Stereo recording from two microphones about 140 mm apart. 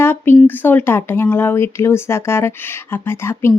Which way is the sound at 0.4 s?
15° left (ahead or behind).